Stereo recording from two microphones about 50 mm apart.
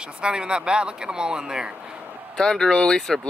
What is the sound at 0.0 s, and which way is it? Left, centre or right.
Speech, centre.